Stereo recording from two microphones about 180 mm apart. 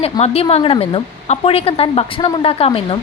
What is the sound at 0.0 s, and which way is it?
A woman's voice, 35° left (ahead or behind).